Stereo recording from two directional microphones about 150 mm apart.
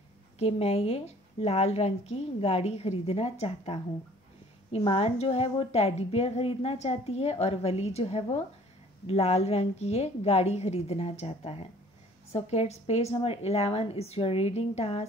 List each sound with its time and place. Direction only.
0.4 s a woman's voice: 40° left (ahead or behind)